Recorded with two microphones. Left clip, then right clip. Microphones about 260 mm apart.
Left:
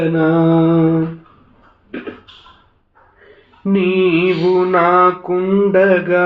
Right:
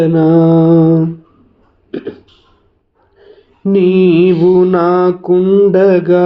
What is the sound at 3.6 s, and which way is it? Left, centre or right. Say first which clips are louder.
Mantra: right 5 dB; right.